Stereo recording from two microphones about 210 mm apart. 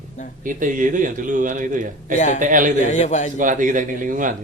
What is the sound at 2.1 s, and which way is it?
Speech, 35° left (ahead or behind).